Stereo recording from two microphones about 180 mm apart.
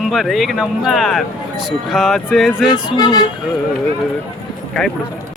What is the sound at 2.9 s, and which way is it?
Speech, 20° left (ahead or behind).